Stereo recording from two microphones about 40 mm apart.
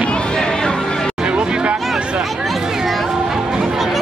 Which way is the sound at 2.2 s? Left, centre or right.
Centre.